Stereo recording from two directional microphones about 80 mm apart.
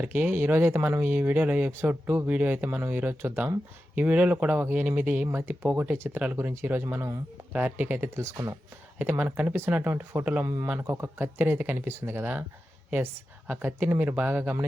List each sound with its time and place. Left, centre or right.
0.0 s speech: right
6.7 s speech: right
7.5 s speech: right
8.1 s speech: right
9.0 s speech: right
10.4 s speech: right
10.8 s speech: right